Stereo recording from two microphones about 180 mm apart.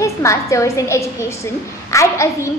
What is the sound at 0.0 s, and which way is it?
A woman's voice, 15° left (ahead or behind).